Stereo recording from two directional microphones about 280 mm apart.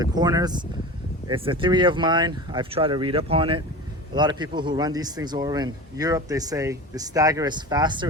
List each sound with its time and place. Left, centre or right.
0.0 s a man's voice: centre